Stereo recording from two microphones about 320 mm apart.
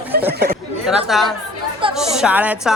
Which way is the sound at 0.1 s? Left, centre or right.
Right.